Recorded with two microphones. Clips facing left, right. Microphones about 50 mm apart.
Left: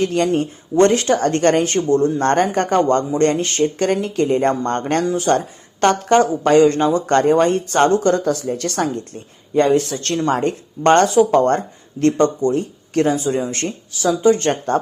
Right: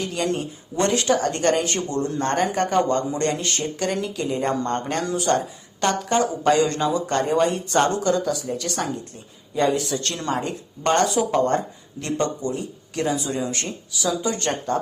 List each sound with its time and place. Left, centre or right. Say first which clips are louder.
0.0 s speech: left 7 dB; left
2.1 s speech: left 5 dB; left